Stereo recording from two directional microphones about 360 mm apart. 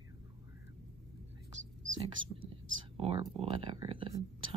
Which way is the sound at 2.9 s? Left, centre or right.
Centre.